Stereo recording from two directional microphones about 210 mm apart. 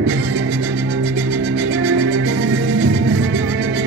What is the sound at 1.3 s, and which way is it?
Music, 60° right (ahead or behind).